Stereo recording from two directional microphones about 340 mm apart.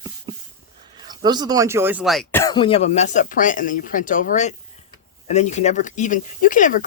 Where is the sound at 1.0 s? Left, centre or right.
Centre.